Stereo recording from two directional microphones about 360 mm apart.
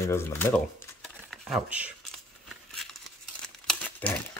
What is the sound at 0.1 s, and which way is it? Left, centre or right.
Speech, centre.